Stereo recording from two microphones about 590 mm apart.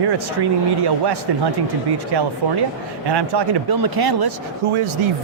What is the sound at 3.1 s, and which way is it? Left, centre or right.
Speech, right.